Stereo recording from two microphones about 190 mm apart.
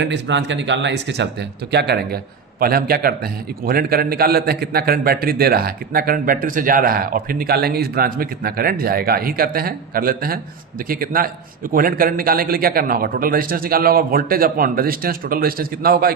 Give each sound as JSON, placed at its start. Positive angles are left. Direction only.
{"t": 0.0, "sound": "a man's voice", "side_deg": -70}